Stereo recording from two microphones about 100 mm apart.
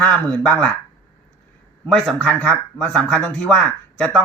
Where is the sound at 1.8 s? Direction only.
5° left (ahead or behind).